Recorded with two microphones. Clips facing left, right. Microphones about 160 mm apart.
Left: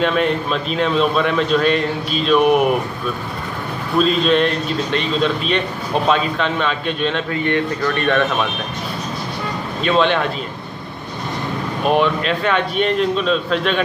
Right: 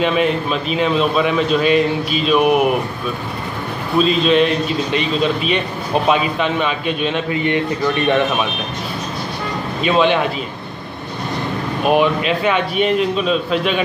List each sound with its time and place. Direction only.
0.0 s a man's voice: 5° right (ahead or behind)
4.0 s a man's voice: centre (ahead or behind)
9.8 s a man's voice: 5° right (ahead or behind)
11.8 s a man's voice: 5° right (ahead or behind)